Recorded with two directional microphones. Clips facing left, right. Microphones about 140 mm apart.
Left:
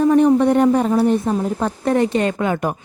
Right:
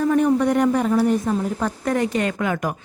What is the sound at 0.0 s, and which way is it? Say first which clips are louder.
A woman's voice: left 5 dB; 25° left (ahead or behind).